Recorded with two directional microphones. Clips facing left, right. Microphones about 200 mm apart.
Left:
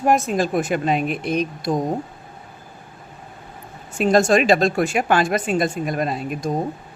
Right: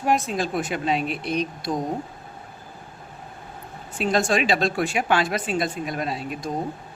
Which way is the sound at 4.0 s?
45° left (ahead or behind).